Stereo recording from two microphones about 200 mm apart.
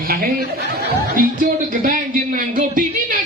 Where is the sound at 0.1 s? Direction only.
45° right (ahead or behind).